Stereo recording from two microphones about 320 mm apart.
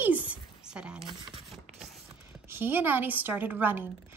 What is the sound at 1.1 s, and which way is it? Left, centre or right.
Speech, centre.